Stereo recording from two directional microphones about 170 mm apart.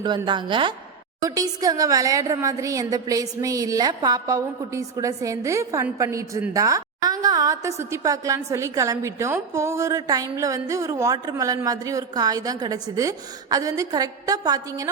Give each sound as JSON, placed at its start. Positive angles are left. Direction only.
{"t": 0.3, "sound": "a woman's voice", "side_deg": -30}